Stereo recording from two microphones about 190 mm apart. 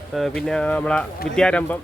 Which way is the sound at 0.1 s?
Centre (ahead or behind).